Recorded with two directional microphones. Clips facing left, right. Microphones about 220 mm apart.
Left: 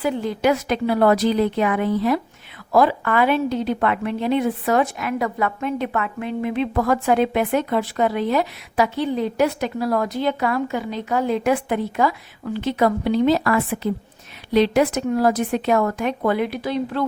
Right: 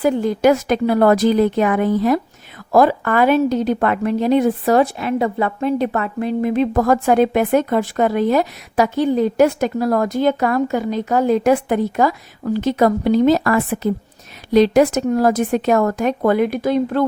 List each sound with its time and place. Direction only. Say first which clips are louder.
0.0 s a woman's voice: right 6 dB; 45° right (ahead or behind)